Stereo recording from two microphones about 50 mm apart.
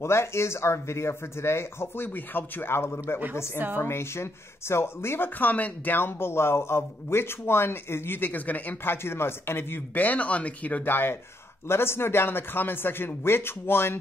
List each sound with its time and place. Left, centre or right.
0.0 s speech: left
2.0 s a man's voice: left
5.4 s speech: left
5.9 s a man's voice: left
8.8 s a man's voice: left
9.9 s speech: left
10.8 s a man's voice: left
11.6 s a man's voice: left